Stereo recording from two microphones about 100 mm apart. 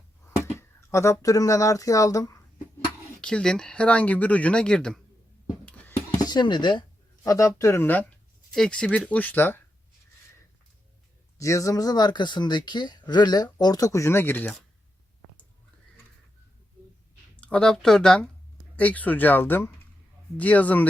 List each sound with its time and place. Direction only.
0.5 s speech: 30° left (ahead or behind)
3.2 s speech: 10° left (ahead or behind)
5.6 s a sound: 15° left (ahead or behind)
6.1 s speech: 45° left (ahead or behind)
7.3 s speech: 30° left (ahead or behind)
8.5 s speech: 5° left (ahead or behind)
11.3 s speech: 35° left (ahead or behind)
17.4 s speech: 10° left (ahead or behind)